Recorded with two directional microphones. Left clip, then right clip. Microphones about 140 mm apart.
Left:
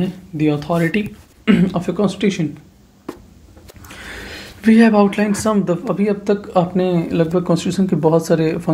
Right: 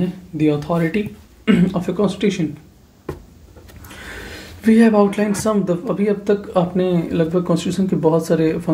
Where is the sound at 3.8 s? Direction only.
20° left (ahead or behind).